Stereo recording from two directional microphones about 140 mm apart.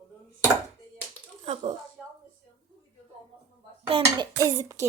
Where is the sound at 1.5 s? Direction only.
50° right (ahead or behind).